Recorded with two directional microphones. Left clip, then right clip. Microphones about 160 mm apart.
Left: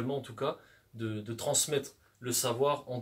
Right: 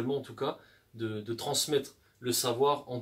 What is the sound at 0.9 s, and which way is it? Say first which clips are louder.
Speech: right 3 dB; 15° left (ahead or behind).